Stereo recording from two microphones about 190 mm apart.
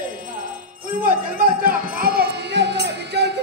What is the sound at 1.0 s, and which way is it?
Music, 50° right (ahead or behind).